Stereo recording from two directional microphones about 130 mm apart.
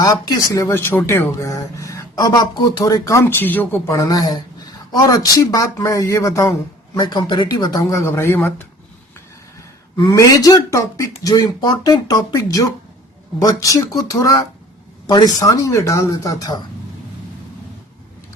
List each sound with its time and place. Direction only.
0.0 s speech: 30° left (ahead or behind)
10.1 s speech: 25° left (ahead or behind)